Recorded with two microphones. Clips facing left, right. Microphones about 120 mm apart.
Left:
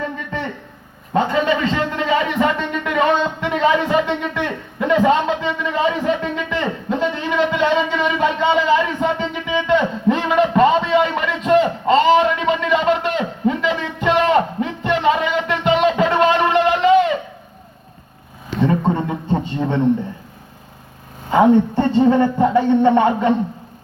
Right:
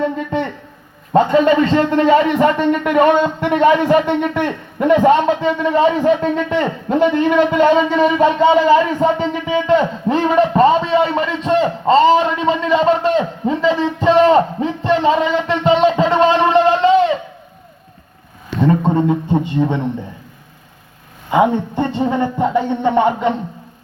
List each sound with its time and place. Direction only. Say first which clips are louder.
1.1 s a man's voice: right 6 dB; 40° right (ahead or behind)
6.6 s a man's voice: right 4 dB; 55° right (ahead or behind); by 17.2 s 30° right (ahead or behind)
19.0 s a man's voice: right 5 dB; 15° right (ahead or behind)
21.2 s a man's voice: left 2 dB; 15° right (ahead or behind)